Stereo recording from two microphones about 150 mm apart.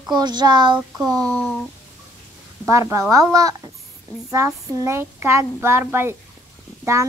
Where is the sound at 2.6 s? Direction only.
20° right (ahead or behind).